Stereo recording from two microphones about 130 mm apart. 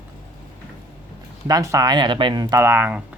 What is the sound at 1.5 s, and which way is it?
Speech, 30° right (ahead or behind).